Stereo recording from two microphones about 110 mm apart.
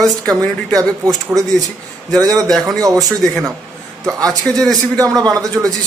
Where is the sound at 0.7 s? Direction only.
35° right (ahead or behind).